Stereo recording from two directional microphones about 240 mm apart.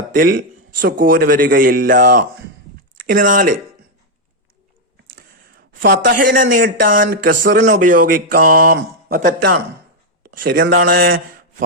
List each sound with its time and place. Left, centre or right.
0.1 s speech: right
5.1 s a sound: right
6.4 s speech: right
6.8 s speech: right